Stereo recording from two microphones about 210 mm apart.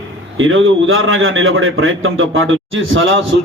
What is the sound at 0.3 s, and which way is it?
A man's voice, 70° right (ahead or behind).